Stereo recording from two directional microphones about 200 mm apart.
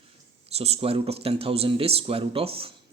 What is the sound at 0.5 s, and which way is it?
Speech, 30° right (ahead or behind).